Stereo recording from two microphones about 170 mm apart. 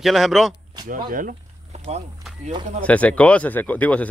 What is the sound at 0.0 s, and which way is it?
Speech, centre (ahead or behind).